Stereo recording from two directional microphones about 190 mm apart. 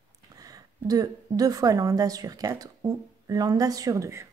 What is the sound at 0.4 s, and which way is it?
A woman's voice, 20° right (ahead or behind).